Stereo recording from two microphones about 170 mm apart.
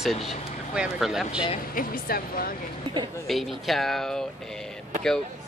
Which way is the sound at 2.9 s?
30° right (ahead or behind).